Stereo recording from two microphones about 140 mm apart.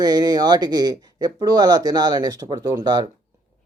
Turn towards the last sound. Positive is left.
turn(degrees=-30)  # may be behind; listen again after turning